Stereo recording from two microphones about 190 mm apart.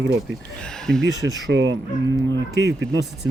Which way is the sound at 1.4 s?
75° right (ahead or behind).